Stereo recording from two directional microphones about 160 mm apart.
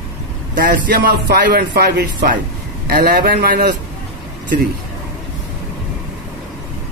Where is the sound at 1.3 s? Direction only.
85° right.